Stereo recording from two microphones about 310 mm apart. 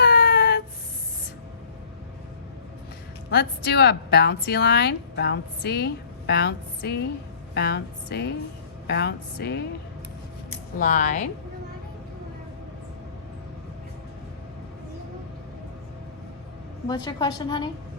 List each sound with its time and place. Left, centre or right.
0.0 s a sound: left
3.2 s a woman's voice: left
16.9 s a woman's voice: centre